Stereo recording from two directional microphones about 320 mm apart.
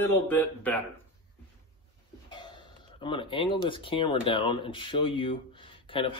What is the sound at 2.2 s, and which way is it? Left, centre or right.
Cough, centre.